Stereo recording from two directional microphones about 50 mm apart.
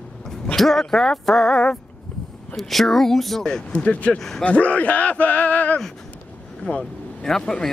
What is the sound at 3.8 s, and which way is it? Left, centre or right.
A man's voice, left.